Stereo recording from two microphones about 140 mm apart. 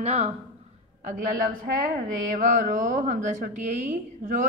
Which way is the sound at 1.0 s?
80° right.